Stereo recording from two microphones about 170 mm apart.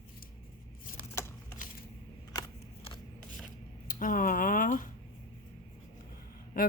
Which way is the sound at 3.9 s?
50° left (ahead or behind).